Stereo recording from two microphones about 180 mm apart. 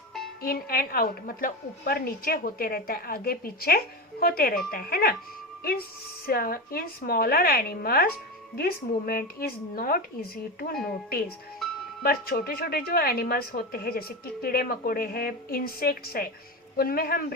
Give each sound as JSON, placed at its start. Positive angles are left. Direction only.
{"t": 0.4, "sound": "a woman's voice", "side_deg": 55}
{"t": 6.2, "sound": "a woman's voice", "side_deg": 55}